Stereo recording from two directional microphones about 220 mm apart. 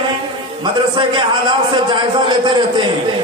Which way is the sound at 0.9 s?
20° right (ahead or behind).